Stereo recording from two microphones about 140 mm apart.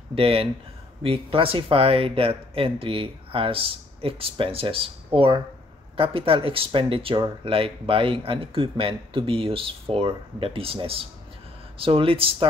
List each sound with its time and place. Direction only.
0.1 s speech: 40° right (ahead or behind)